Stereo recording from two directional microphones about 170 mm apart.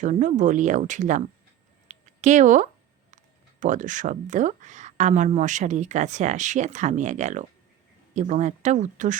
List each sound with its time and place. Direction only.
0.0 s speech: 45° right (ahead or behind)
1.9 s a sound: 45° right (ahead or behind)
3.6 s speech: 50° right (ahead or behind)